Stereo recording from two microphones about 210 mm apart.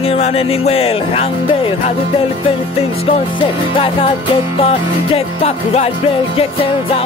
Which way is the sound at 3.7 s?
25° left (ahead or behind).